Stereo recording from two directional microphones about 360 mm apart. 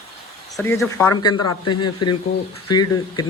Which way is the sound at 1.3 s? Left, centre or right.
Left.